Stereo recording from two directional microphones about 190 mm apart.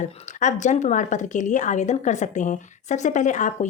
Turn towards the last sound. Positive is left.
turn(degrees=40)  # may be behind; listen again after turning